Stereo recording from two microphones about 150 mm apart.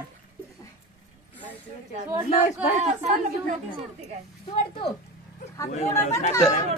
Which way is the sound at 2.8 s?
50° right (ahead or behind).